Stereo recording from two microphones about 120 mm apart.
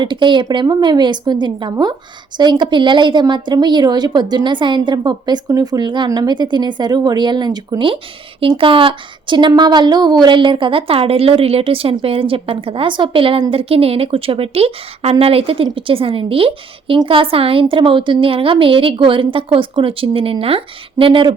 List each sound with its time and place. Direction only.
0.0 s a woman's voice: 40° right (ahead or behind)